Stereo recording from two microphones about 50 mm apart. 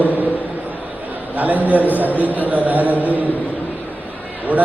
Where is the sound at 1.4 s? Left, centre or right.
Right.